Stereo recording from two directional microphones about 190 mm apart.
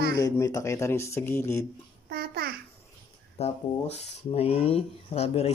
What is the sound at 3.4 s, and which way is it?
Speech, 35° left (ahead or behind).